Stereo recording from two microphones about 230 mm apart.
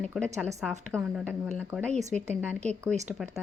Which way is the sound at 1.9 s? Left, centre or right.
Right.